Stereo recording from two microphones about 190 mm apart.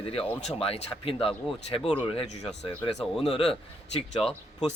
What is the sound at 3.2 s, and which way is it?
Speech, 30° left (ahead or behind).